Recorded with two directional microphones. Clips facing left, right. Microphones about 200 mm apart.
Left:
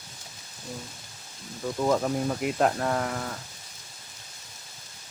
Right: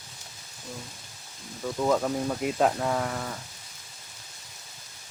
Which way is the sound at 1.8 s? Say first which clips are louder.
Even; 5° left (ahead or behind).